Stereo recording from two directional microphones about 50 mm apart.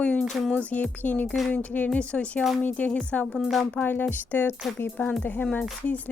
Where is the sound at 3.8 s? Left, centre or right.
Left.